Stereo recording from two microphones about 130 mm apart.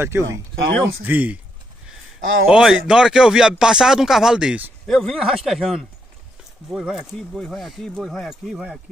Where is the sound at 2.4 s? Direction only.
5° right (ahead or behind).